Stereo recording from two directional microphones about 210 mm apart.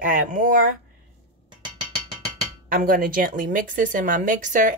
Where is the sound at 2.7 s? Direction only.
40° right (ahead or behind).